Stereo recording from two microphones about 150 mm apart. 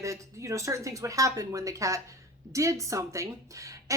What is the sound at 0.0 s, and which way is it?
A woman's voice, 20° right (ahead or behind).